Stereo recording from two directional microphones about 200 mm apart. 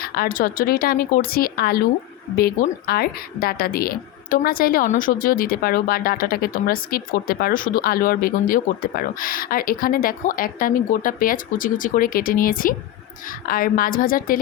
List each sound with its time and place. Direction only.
0.0 s a woman's voice: 50° left (ahead or behind)